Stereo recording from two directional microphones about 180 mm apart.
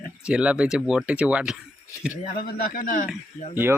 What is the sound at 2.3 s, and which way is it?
Speech, 55° left (ahead or behind).